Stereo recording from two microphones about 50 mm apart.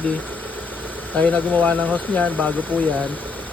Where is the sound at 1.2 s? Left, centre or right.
Left.